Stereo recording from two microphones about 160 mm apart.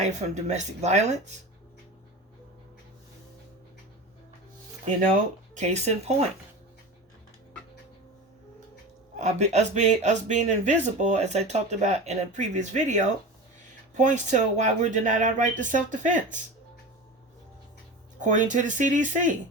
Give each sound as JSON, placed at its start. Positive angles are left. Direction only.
{"t": 0.0, "sound": "speech", "side_deg": -45}
{"t": 5.5, "sound": "speech", "side_deg": -45}
{"t": 9.1, "sound": "speech", "side_deg": -45}
{"t": 18.2, "sound": "speech", "side_deg": -50}